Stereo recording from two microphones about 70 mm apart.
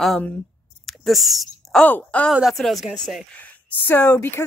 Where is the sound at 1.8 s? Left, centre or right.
Left.